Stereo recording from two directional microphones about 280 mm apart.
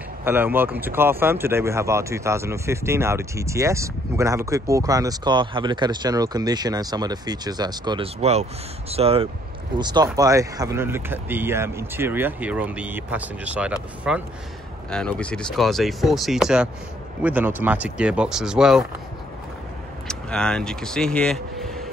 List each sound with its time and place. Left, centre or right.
0.2 s speech: centre
20.1 s speech: centre